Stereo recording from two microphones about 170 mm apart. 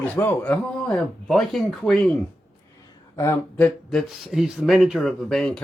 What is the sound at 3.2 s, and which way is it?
Speech, 15° left (ahead or behind).